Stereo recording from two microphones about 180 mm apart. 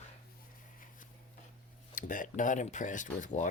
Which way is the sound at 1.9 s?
50° left (ahead or behind).